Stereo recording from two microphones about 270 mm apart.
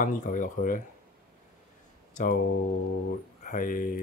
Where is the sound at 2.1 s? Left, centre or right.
Left.